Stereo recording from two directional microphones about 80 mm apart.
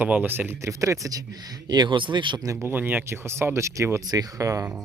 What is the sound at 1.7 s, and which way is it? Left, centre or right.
Speech, right.